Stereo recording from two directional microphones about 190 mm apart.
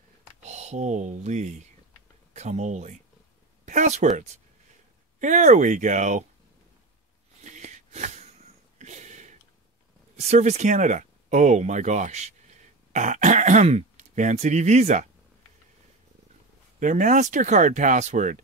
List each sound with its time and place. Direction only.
0.4 s speech: 35° right (ahead or behind)
7.4 s wheeze: 40° right (ahead or behind)
8.7 s a sound: 40° right (ahead or behind)
10.1 s speech: 35° right (ahead or behind)
16.8 s speech: 40° right (ahead or behind)